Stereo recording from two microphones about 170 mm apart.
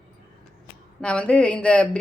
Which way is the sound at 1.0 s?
5° left (ahead or behind).